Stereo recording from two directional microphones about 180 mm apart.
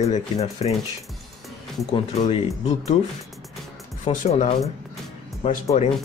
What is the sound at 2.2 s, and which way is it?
Speech, 35° left (ahead or behind).